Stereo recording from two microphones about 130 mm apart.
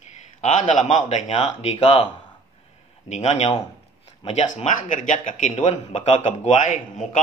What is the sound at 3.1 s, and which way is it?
A man's voice, 60° left (ahead or behind).